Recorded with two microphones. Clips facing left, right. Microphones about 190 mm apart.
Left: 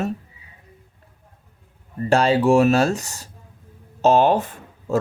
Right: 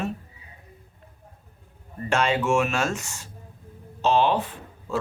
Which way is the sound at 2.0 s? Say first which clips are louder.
Left 6 dB; 35° left (ahead or behind).